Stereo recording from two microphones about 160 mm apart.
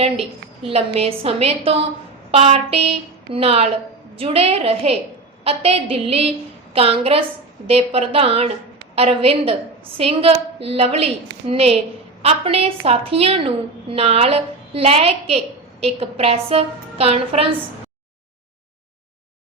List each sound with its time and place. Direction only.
0.7 s a woman's voice: 40° right (ahead or behind)